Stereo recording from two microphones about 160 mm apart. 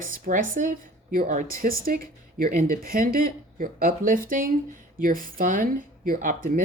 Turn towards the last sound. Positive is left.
turn(degrees=-55)  # may be behind; listen again after turning